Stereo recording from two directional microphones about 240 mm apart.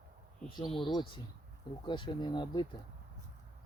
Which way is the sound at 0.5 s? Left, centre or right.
Centre.